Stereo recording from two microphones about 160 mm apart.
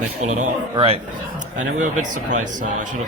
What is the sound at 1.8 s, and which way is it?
Speech, 50° right (ahead or behind).